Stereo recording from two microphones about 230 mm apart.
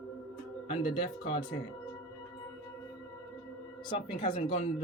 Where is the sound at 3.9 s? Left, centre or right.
Left.